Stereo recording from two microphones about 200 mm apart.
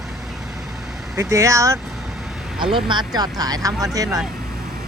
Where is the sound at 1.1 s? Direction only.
15° right (ahead or behind).